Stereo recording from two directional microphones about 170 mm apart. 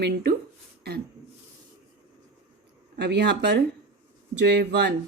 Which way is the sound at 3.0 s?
80° right.